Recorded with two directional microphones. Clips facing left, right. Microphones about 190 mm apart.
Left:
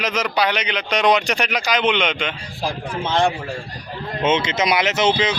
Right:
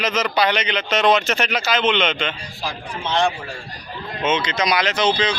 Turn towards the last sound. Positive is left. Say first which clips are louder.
# left 1 dB
turn(degrees=25)  # may be behind; listen again after turning